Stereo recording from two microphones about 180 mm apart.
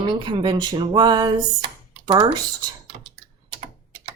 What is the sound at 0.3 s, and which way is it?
A woman's voice, 25° right (ahead or behind).